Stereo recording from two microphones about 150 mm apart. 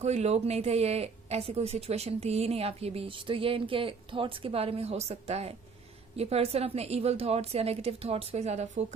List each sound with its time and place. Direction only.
0.0 s speech: 45° right (ahead or behind)